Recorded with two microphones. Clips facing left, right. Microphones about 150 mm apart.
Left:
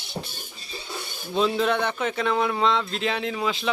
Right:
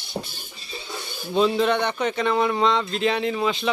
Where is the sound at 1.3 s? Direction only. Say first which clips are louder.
Right 3 dB; centre (ahead or behind).